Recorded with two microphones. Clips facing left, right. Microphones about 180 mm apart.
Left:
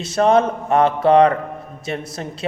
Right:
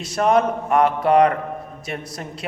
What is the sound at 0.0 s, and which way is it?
A man's voice, 25° left (ahead or behind).